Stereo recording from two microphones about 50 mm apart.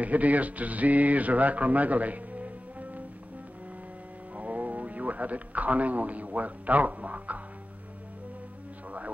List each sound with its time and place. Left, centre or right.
0.0 s speech: right
4.4 s a man's voice: right